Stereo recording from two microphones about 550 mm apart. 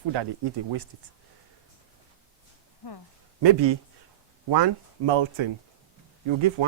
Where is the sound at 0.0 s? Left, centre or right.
Right.